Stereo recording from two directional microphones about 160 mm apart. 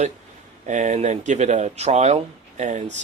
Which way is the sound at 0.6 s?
50° right (ahead or behind).